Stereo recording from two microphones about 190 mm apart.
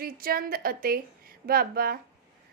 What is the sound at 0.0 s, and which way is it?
A woman's voice, 50° right (ahead or behind).